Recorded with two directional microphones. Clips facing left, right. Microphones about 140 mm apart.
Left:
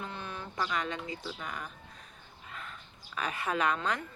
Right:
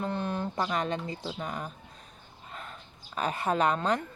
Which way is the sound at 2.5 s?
30° right (ahead or behind).